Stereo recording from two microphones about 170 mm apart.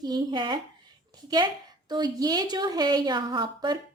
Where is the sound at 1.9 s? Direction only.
25° right (ahead or behind).